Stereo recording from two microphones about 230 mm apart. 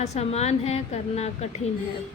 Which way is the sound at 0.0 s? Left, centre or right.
Left.